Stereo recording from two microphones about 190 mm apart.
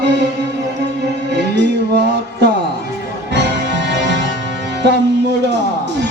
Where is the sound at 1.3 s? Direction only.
65° right (ahead or behind).